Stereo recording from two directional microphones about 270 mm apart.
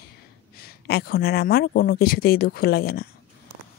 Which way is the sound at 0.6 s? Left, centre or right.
Left.